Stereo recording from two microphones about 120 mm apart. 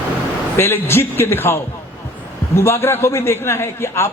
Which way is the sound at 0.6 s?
20° left (ahead or behind).